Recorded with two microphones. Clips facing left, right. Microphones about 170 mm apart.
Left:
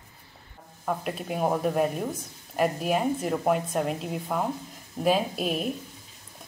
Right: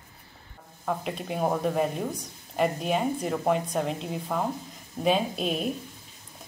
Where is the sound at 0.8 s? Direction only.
5° left (ahead or behind).